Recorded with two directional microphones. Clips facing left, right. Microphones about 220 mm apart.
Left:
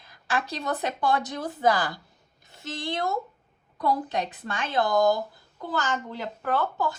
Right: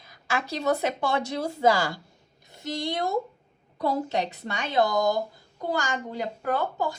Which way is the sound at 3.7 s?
25° right (ahead or behind).